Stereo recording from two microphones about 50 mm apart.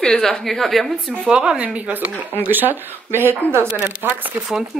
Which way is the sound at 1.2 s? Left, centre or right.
Centre.